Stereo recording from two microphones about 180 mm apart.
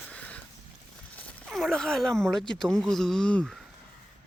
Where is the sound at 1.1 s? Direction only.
Centre (ahead or behind).